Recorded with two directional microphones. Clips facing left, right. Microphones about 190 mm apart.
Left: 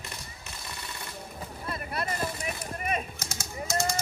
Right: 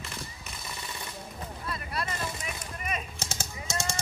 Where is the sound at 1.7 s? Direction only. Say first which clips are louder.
Left 2 dB; 55° left (ahead or behind).